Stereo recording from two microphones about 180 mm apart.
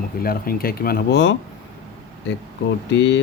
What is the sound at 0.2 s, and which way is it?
Speech, 55° left (ahead or behind).